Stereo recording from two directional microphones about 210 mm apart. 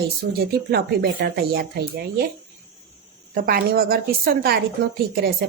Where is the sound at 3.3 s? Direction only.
45° right (ahead or behind).